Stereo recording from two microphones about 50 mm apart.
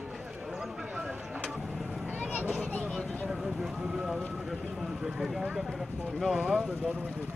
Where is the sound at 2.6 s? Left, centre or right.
Left.